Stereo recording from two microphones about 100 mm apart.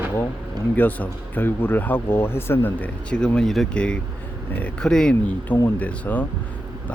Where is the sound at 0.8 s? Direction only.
15° left (ahead or behind).